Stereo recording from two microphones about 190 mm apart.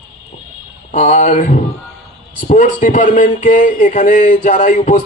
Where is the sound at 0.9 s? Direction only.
40° left (ahead or behind).